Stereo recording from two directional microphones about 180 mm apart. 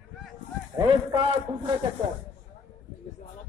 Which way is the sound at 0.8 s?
30° right (ahead or behind).